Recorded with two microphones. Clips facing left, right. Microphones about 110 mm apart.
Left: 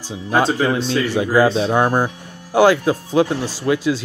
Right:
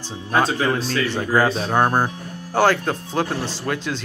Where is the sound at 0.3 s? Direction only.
25° left (ahead or behind).